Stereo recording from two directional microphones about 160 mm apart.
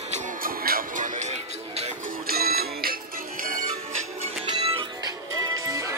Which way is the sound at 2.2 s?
70° right (ahead or behind).